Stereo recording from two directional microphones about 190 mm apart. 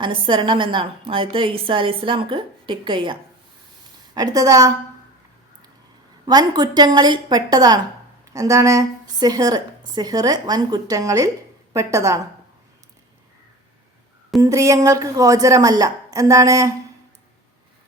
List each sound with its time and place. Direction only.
0.0 s a woman's voice: 25° right (ahead or behind)
6.2 s a woman's voice: 20° right (ahead or behind)
14.4 s a woman's voice: 15° right (ahead or behind)